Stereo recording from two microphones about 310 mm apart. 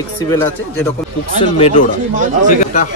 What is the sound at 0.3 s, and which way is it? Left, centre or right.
Speech, centre.